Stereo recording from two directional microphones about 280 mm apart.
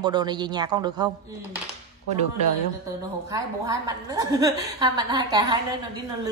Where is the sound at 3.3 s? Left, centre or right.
Centre.